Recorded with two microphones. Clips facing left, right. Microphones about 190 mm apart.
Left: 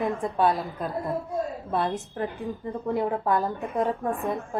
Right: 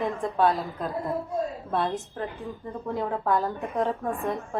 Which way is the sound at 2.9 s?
15° left (ahead or behind).